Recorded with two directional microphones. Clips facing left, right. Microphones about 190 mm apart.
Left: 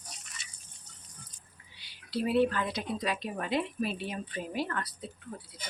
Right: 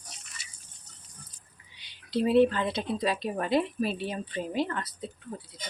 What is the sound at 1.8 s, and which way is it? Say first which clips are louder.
A woman's voice: right 5 dB; 20° right (ahead or behind).